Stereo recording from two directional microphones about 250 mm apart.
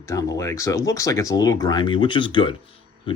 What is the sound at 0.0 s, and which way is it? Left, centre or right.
Speech, centre.